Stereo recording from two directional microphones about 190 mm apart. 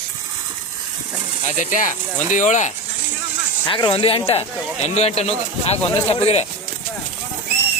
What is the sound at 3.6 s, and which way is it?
Speech, 25° left (ahead or behind).